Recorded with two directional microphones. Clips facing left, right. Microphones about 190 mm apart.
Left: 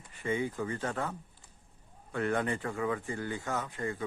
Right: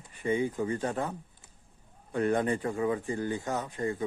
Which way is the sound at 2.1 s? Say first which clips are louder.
Right 4 dB; 20° right (ahead or behind).